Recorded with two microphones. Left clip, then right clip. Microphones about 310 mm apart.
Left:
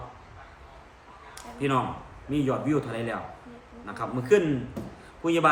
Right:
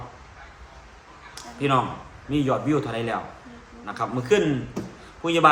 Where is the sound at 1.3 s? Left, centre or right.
Centre.